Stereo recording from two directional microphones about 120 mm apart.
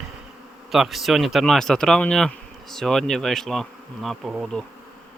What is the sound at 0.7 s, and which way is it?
Speech, centre (ahead or behind).